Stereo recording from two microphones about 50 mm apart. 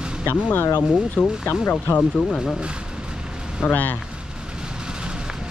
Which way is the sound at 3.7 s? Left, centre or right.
Left.